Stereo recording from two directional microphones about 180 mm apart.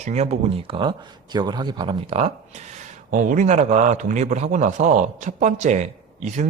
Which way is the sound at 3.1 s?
45° right (ahead or behind).